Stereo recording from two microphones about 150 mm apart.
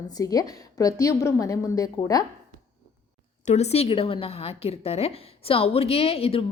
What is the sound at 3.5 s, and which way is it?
A woman's voice, 45° left (ahead or behind).